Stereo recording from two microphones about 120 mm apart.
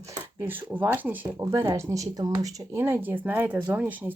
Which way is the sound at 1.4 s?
25° right (ahead or behind).